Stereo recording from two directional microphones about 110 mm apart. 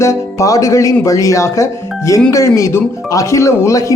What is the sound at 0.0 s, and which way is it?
Speech, 25° left (ahead or behind).